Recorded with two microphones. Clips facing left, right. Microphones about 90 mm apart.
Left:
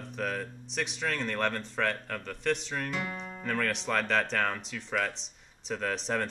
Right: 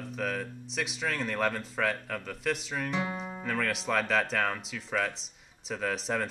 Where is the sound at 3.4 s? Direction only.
5° right (ahead or behind).